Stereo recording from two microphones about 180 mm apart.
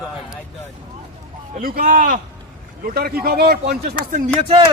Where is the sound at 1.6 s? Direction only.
50° right (ahead or behind).